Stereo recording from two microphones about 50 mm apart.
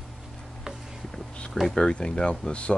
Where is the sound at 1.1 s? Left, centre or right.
Centre.